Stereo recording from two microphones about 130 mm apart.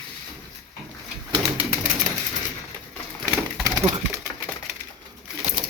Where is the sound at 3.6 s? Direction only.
25° right (ahead or behind).